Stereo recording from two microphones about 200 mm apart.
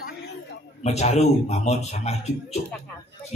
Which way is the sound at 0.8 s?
35° left (ahead or behind).